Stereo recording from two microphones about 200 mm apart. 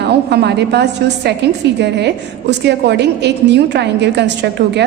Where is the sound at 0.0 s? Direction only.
55° right (ahead or behind).